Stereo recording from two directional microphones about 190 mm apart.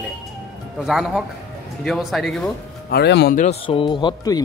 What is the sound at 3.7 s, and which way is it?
Speech, 25° left (ahead or behind).